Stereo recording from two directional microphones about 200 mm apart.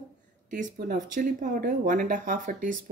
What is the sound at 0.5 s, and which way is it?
Speech, 40° right (ahead or behind).